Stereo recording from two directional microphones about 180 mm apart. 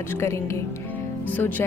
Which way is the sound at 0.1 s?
15° left (ahead or behind).